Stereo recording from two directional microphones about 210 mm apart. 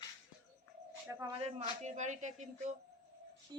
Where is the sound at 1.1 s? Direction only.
15° right (ahead or behind).